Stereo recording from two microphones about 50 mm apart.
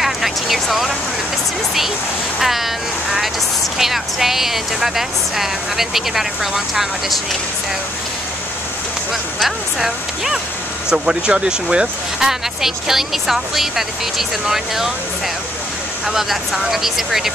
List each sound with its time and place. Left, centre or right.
0.0 s vehicle: centre
2.4 s speech: centre
9.4 s speech: centre
12.3 s speech: centre
16.1 s speech: centre